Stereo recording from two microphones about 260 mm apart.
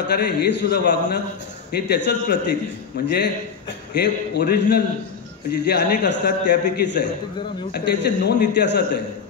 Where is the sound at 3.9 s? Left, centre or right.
Left.